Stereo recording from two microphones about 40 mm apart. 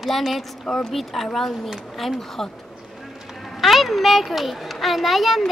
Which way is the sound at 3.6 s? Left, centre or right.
Centre.